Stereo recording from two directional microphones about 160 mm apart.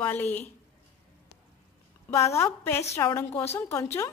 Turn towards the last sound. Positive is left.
turn(degrees=15)  # may be behind; listen again after turning